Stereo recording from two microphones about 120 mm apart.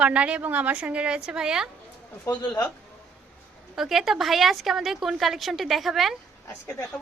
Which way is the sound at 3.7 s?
5° right (ahead or behind).